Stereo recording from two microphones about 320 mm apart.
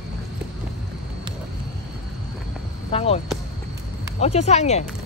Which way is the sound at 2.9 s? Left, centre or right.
Centre.